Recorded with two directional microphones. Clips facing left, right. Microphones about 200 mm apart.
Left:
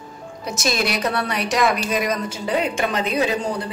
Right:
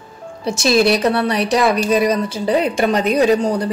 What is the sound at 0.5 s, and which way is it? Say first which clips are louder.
A woman's voice: right 9 dB; 30° right (ahead or behind).